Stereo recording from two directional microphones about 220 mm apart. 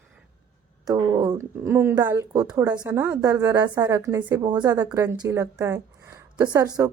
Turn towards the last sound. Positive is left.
turn(degrees=-15)  # may be behind; listen again after turning